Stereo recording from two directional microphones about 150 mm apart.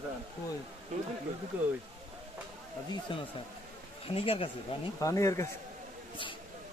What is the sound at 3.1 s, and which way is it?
Speech, 35° left (ahead or behind).